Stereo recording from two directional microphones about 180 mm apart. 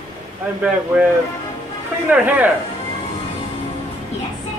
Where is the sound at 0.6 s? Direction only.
5° right (ahead or behind).